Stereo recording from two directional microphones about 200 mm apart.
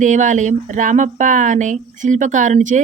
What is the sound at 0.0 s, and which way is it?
Speech, 40° right (ahead or behind).